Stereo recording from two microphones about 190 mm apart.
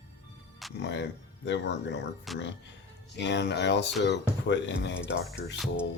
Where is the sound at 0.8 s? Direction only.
65° left (ahead or behind).